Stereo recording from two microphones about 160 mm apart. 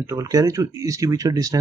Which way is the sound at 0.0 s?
20° right (ahead or behind).